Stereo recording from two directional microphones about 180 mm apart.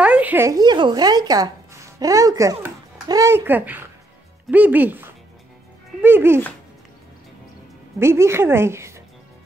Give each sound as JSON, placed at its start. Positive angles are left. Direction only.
{"t": 0.0, "sound": "a woman's voice", "side_deg": -10}
{"t": 8.0, "sound": "a woman's voice", "side_deg": -15}